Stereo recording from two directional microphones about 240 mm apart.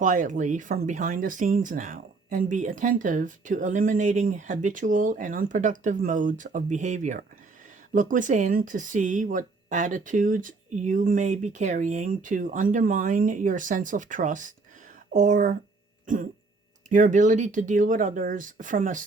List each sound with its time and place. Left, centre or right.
0.0 s speech: right